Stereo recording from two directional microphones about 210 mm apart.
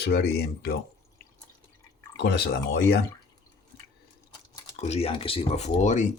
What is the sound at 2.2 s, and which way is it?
Speech, 55° left (ahead or behind).